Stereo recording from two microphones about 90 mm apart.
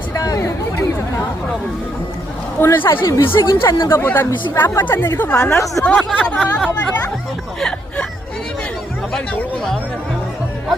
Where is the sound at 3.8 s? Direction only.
30° left (ahead or behind); by 6.3 s 15° left (ahead or behind).